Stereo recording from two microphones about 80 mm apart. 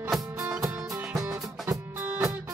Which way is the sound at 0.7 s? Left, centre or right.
Centre.